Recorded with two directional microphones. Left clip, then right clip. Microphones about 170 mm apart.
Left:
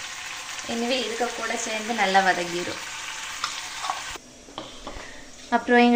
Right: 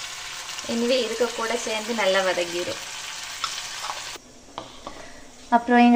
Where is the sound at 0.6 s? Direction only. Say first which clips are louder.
Right 3 dB; 25° right (ahead or behind).